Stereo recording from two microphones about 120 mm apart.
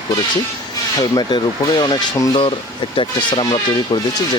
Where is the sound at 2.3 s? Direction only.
50° left (ahead or behind).